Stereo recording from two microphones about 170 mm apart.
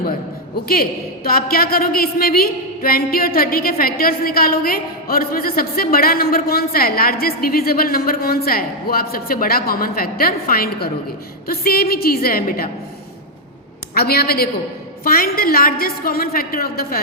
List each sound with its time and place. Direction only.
0.7 s a woman's voice: 60° left (ahead or behind)
13.9 s a woman's voice: 65° left (ahead or behind)